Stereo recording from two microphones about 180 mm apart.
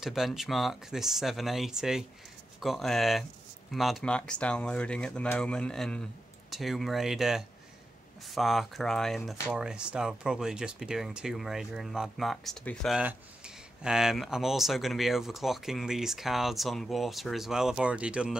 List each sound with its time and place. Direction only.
0.0 s speech: centre (ahead or behind)